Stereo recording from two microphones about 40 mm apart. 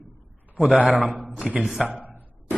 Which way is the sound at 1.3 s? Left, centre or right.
Right.